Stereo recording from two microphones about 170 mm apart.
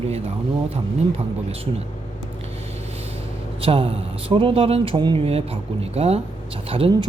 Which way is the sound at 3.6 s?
35° right (ahead or behind).